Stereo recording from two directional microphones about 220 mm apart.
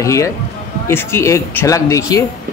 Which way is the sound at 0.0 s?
15° left (ahead or behind).